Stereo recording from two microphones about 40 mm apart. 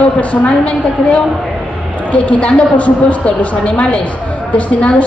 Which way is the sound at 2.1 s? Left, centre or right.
Left.